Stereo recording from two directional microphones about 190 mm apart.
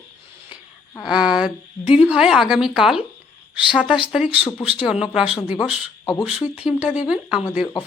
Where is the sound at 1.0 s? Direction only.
5° right (ahead or behind).